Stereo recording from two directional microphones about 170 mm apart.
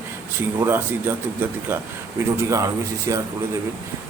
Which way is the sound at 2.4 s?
20° right (ahead or behind).